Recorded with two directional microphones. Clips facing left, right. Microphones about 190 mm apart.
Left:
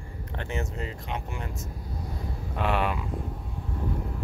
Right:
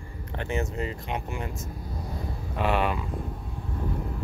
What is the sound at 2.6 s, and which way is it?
Speech, centre (ahead or behind).